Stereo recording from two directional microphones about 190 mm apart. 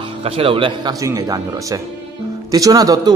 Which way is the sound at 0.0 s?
30° right (ahead or behind).